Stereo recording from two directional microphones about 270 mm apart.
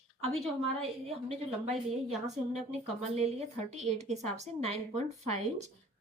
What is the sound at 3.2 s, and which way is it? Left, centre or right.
A woman's voice, right.